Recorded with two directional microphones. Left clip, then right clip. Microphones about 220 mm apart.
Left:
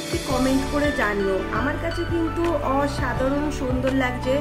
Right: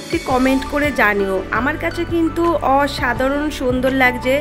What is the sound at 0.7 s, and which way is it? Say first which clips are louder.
Speech: right 8 dB; 45° right (ahead or behind).